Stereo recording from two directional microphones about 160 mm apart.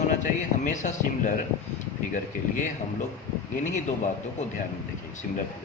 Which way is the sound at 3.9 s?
55° left (ahead or behind).